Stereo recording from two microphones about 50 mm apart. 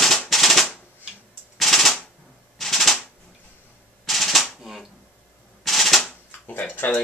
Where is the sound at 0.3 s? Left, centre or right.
Centre.